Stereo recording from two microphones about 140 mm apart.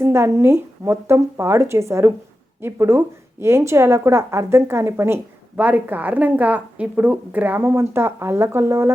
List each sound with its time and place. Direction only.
0.0 s a woman's voice: 20° right (ahead or behind)